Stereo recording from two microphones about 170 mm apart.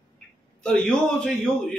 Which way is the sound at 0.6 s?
5° left (ahead or behind).